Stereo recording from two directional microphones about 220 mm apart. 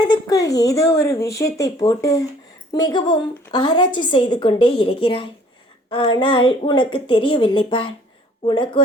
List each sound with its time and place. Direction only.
0.0 s speech: 15° left (ahead or behind)